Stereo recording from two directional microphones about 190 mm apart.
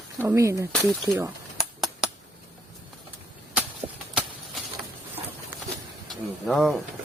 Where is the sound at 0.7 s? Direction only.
5° left (ahead or behind).